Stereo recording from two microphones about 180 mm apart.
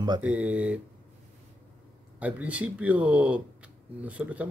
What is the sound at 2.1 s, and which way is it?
Speech, 10° right (ahead or behind).